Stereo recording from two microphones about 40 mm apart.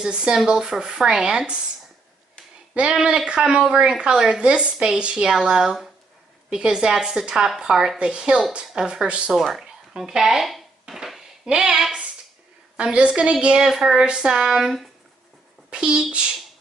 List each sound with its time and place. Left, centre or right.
0.1 s a woman's voice: right
2.8 s speech: right
3.3 s a woman's voice: right
8.0 s a woman's voice: right
9.4 s speech: centre
10.9 s a woman's voice: right
12.9 s a woman's voice: right
13.7 s a woman's voice: centre